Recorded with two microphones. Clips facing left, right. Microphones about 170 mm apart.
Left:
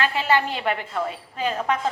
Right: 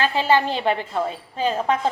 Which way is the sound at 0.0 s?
30° right (ahead or behind).